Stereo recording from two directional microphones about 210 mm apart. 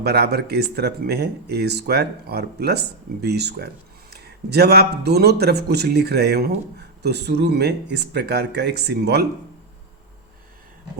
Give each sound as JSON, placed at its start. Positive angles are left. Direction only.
{"t": 0.0, "sound": "speech", "side_deg": -50}